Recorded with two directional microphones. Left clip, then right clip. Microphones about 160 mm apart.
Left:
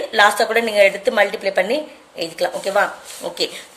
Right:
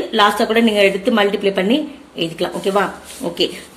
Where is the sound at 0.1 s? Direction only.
35° left (ahead or behind).